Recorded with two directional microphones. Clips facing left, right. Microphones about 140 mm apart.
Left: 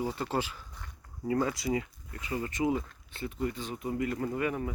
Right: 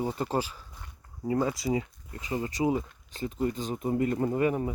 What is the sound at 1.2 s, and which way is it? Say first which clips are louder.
Speech: right 2 dB; 20° right (ahead or behind).